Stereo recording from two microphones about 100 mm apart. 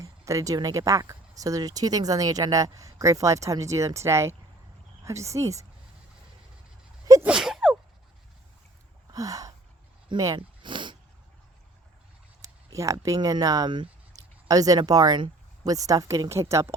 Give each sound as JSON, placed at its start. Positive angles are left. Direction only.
{"t": 0.0, "sound": "speech", "side_deg": -35}
{"t": 7.3, "sound": "gasp", "side_deg": -5}
{"t": 9.1, "sound": "a sound", "side_deg": -35}
{"t": 10.3, "sound": "a sound", "side_deg": -55}
{"t": 12.4, "sound": "speech", "side_deg": -30}
{"t": 14.2, "sound": "speech", "side_deg": -35}